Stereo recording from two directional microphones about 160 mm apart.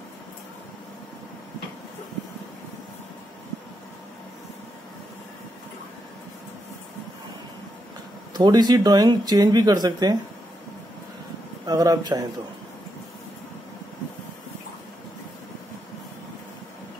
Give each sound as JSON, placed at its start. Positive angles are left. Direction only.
{"t": 8.3, "sound": "speech", "side_deg": -25}
{"t": 11.6, "sound": "a man's voice", "side_deg": -25}